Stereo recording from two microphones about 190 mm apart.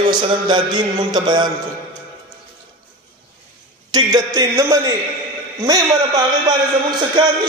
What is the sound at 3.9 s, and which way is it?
A man's voice, 20° right (ahead or behind).